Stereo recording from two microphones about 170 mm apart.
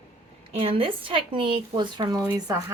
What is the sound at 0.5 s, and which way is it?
A woman's voice, 35° right (ahead or behind).